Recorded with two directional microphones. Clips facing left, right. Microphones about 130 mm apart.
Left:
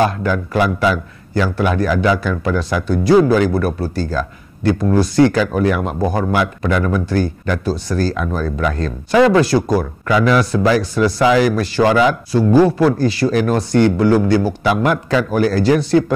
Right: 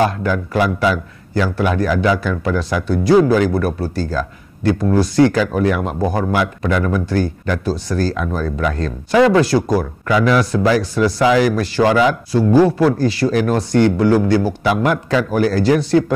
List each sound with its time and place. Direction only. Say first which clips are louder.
0.0 s speech: even; 15° left (ahead or behind)
5.2 s speech: even; 15° left (ahead or behind)